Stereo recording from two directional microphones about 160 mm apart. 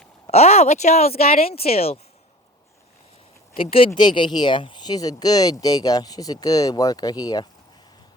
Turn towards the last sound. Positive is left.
turn(degrees=25)  # may be behind; listen again after turning